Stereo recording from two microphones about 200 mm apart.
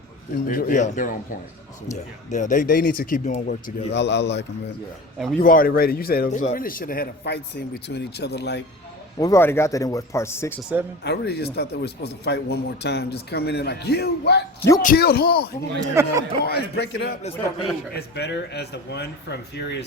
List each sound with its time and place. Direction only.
0.4 s a man's voice: 45° left (ahead or behind)
3.9 s a man's voice: 60° left (ahead or behind)
5.4 s a man's voice: 45° left (ahead or behind)
9.1 s speech: 15° left (ahead or behind)
11.0 s a man's voice: 55° left (ahead or behind)
15.8 s speech: 20° right (ahead or behind)
16.4 s a man's voice: 55° left (ahead or behind)